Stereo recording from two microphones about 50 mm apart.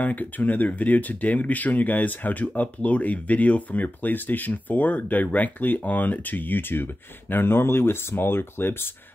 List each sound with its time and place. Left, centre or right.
0.0 s speech: left